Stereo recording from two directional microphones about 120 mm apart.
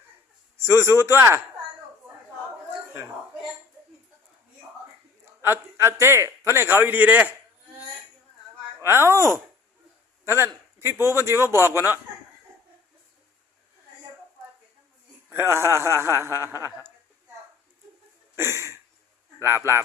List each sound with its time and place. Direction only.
0.7 s a man's voice: 20° right (ahead or behind)
5.2 s a man's voice: 20° right (ahead or behind)
8.8 s a man's voice: 20° right (ahead or behind)
15.3 s a man's voice: 20° right (ahead or behind)
18.3 s a sound: 20° right (ahead or behind)
19.4 s a man's voice: 25° right (ahead or behind)